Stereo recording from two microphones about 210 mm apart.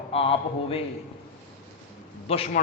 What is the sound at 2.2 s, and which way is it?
Speech, 30° left (ahead or behind).